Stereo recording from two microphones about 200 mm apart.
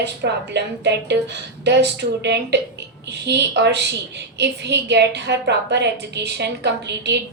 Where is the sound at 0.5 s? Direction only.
60° right (ahead or behind).